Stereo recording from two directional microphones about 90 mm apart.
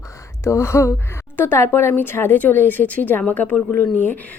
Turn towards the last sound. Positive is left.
turn(degrees=20)  # may be behind; listen again after turning